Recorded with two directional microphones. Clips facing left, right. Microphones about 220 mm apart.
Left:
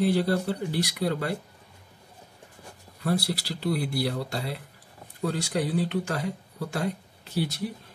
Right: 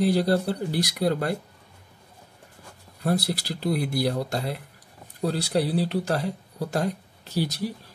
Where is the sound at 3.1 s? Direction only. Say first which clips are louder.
Right 2 dB; 45° right (ahead or behind).